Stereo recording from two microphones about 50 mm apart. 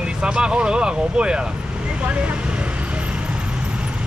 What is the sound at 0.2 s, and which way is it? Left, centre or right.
Speech, centre.